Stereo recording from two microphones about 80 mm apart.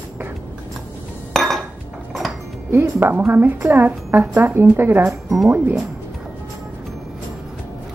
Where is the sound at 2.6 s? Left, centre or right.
Right.